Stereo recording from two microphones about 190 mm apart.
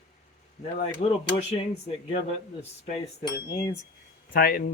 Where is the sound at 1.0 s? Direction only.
35° left (ahead or behind).